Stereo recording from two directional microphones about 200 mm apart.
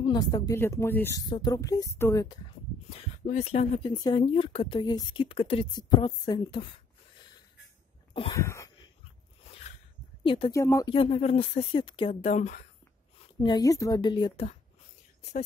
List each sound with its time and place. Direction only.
0.0 s speech: 20° left (ahead or behind)
3.3 s speech: 35° left (ahead or behind)
3.9 s speech: 20° left (ahead or behind)
8.1 s a sound: 25° left (ahead or behind)
8.4 s a sound: 15° left (ahead or behind)
10.2 s speech: 25° left (ahead or behind)
10.5 s speech: 15° left (ahead or behind)
11.0 s speech: 30° left (ahead or behind)
13.4 s speech: 20° left (ahead or behind)